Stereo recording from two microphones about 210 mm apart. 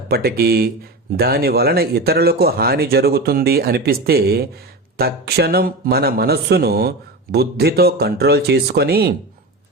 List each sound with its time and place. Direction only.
0.1 s a man's voice: 45° right (ahead or behind)